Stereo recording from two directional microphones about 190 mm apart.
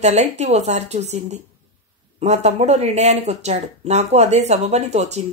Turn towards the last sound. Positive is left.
turn(degrees=-35)  # may be behind; listen again after turning